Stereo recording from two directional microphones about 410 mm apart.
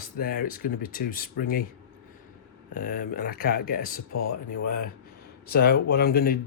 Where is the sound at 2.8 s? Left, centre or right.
Left.